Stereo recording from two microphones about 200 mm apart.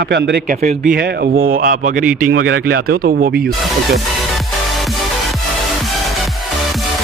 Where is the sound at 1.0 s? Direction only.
55° right (ahead or behind).